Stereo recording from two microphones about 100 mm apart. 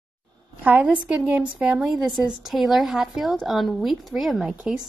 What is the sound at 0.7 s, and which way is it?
A woman's voice, 15° right (ahead or behind).